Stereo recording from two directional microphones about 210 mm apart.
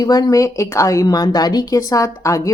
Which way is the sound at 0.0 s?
15° left (ahead or behind).